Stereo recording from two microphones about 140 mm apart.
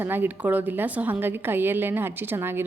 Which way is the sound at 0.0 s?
15° right (ahead or behind).